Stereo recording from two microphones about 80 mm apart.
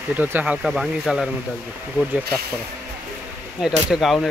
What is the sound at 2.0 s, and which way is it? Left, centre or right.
Speech, right.